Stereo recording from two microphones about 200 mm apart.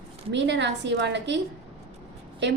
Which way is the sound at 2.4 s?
60° right (ahead or behind).